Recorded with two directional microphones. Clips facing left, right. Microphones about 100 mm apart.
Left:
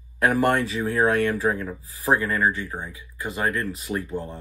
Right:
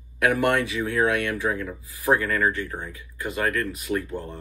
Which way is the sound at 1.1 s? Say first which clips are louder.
Left 3 dB; 40° left (ahead or behind).